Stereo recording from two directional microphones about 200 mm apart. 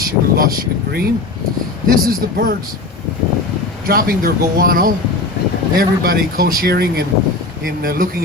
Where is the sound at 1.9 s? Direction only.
45° right (ahead or behind).